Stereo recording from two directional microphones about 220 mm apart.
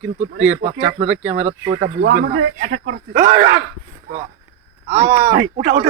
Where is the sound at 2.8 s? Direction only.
35° right (ahead or behind).